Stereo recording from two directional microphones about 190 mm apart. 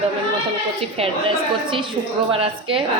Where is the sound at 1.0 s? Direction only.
30° right (ahead or behind).